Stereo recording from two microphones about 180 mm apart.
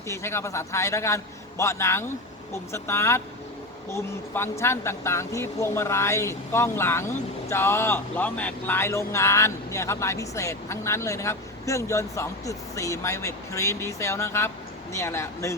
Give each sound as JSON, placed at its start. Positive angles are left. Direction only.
{"t": 0.1, "sound": "speech", "side_deg": 15}